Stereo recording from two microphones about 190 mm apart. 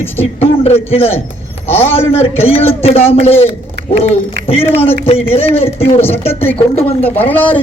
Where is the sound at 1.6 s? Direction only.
10° left (ahead or behind).